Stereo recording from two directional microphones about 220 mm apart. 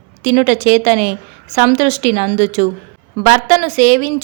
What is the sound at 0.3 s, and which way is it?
Speech, 35° right (ahead or behind).